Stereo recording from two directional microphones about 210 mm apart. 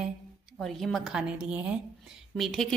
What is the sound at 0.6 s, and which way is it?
A woman's voice, centre (ahead or behind).